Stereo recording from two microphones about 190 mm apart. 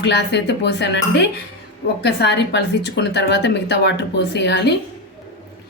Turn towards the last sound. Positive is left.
turn(degrees=65)  # may be behind; listen again after turning